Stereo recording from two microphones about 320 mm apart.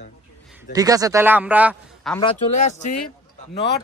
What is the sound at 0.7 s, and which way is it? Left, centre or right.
A man's voice, centre.